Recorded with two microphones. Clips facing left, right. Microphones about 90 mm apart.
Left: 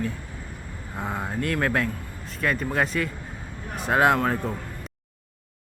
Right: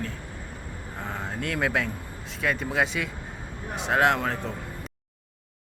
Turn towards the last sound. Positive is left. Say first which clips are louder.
# left 3 dB
turn(degrees=10)  # may be behind; listen again after turning